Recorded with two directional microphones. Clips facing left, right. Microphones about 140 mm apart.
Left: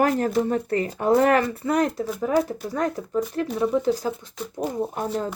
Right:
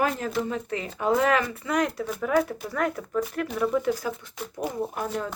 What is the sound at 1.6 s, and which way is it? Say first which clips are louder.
Speech: left 4 dB; 35° left (ahead or behind).